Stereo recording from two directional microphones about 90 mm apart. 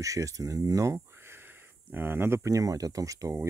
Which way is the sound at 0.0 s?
35° right (ahead or behind).